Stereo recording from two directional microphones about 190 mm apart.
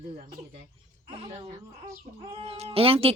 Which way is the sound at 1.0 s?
30° right (ahead or behind).